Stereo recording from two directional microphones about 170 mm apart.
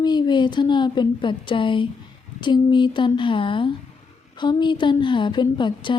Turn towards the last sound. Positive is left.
turn(degrees=25)  # may be behind; listen again after turning